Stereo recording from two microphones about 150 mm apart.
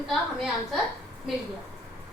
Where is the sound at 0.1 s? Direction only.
Centre (ahead or behind).